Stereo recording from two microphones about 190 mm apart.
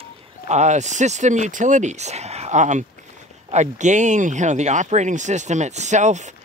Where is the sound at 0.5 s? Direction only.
40° right (ahead or behind).